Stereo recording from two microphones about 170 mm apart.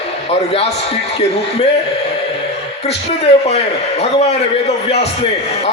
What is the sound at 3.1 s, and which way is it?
A man's voice, 40° left (ahead or behind).